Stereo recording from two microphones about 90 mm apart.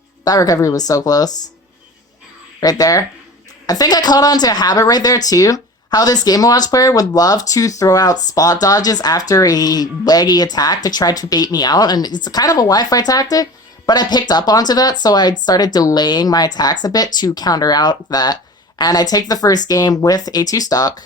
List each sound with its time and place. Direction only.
0.3 s speech: 45° left (ahead or behind)
2.6 s speech: 45° left (ahead or behind)